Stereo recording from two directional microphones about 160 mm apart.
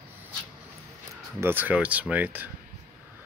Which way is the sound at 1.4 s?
15° right (ahead or behind).